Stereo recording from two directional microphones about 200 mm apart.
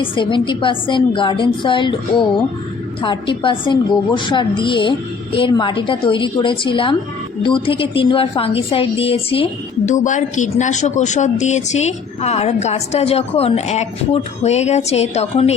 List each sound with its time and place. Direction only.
0.0 s a woman's voice: 25° left (ahead or behind)
3.0 s a woman's voice: 25° left (ahead or behind)